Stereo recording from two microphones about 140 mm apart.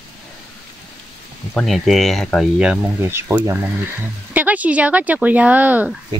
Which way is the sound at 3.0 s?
15° right (ahead or behind).